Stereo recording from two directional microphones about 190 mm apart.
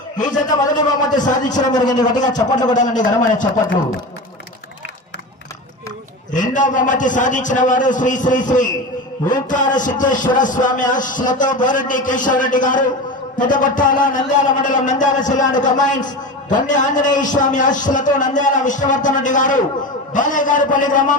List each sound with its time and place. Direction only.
0.2 s a man's voice: 40° left (ahead or behind)
0.5 s speech: 20° left (ahead or behind)
1.1 s a man's voice: 40° left (ahead or behind)
1.7 s speech: 20° left (ahead or behind)
2.7 s a man's voice: 40° left (ahead or behind)
6.3 s a man's voice: 40° left (ahead or behind)